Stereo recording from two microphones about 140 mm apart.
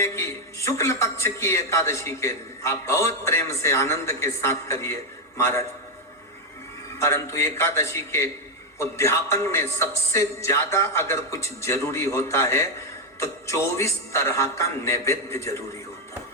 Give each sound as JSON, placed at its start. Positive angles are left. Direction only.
{"t": 0.0, "sound": "a man's voice", "side_deg": 20}
{"t": 7.0, "sound": "a man's voice", "side_deg": 20}